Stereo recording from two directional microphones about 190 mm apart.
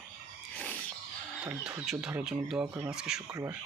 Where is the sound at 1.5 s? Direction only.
5° right (ahead or behind).